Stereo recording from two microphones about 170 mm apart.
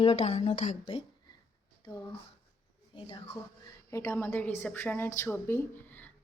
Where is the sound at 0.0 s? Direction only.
40° left (ahead or behind).